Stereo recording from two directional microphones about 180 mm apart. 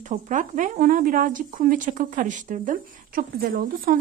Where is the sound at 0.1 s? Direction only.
45° right (ahead or behind).